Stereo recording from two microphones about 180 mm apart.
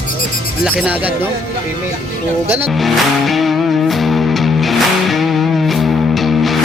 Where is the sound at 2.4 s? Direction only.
10° right (ahead or behind).